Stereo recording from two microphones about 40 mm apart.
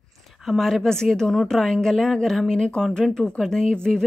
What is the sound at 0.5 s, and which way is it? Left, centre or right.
Speech, centre.